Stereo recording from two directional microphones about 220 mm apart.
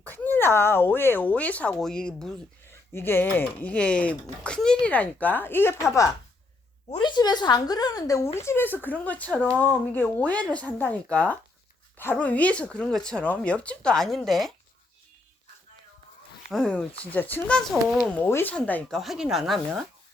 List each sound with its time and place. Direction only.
0.0 s speech: 10° left (ahead or behind)
16.5 s speech: centre (ahead or behind)